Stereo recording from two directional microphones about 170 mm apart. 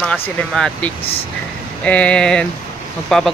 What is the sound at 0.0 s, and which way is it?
Speech, 5° left (ahead or behind).